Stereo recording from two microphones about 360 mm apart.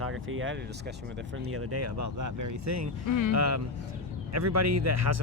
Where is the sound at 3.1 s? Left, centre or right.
Left.